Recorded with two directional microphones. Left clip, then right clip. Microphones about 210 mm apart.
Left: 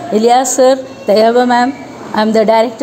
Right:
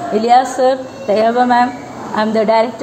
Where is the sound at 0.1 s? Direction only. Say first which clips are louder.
Left 2 dB; 50° left (ahead or behind).